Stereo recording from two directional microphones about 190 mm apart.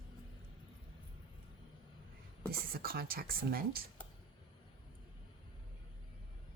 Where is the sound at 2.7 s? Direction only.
55° right (ahead or behind).